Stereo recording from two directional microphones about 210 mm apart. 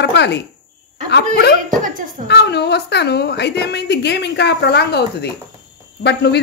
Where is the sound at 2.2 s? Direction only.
55° left (ahead or behind).